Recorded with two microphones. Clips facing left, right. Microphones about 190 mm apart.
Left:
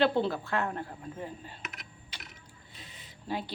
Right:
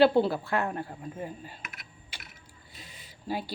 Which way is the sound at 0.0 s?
10° right (ahead or behind).